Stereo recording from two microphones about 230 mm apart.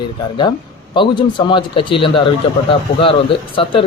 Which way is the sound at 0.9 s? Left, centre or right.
Centre.